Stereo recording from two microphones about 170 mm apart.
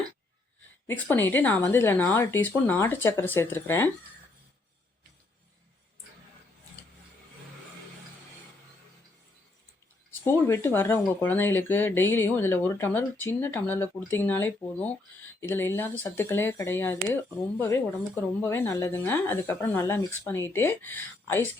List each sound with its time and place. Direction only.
1.1 s speech: 10° left (ahead or behind)
10.2 s speech: 15° left (ahead or behind)